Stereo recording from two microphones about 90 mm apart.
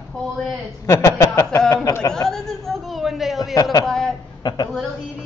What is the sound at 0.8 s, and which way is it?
Speech, 30° left (ahead or behind).